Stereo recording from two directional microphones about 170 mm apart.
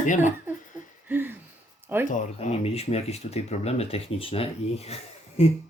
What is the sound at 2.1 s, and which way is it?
Speech, 45° left (ahead or behind).